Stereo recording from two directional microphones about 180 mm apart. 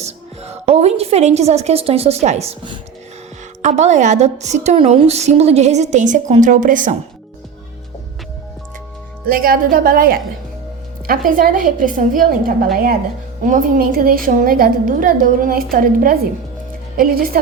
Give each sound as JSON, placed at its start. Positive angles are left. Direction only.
{"t": 0.0, "sound": "a woman's voice", "side_deg": -35}
{"t": 9.3, "sound": "a woman's voice", "side_deg": -55}
{"t": 11.3, "sound": "a woman's voice", "side_deg": -50}